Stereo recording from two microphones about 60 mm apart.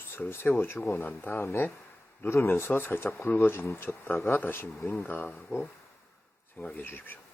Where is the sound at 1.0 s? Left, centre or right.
Left.